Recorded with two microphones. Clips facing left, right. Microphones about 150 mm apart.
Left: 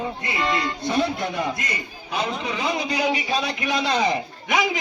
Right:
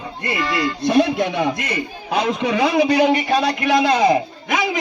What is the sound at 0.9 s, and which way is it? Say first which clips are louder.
A man's voice: right 8 dB; 80° right.